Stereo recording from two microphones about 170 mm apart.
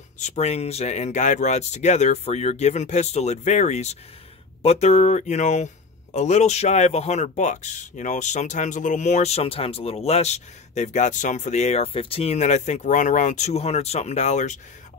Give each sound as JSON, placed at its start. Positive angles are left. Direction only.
{"t": 0.2, "sound": "speech", "side_deg": 40}